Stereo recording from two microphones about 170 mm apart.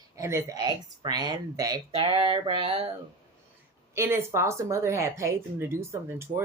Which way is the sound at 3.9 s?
15° right (ahead or behind).